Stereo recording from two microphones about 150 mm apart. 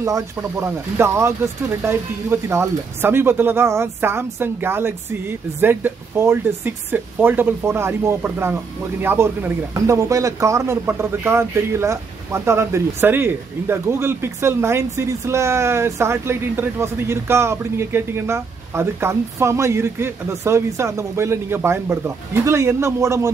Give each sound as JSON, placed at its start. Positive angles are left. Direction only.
{"t": 0.0, "sound": "speech", "side_deg": -20}